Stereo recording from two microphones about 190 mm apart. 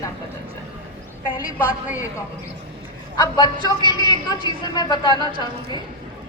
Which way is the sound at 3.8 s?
25° right (ahead or behind).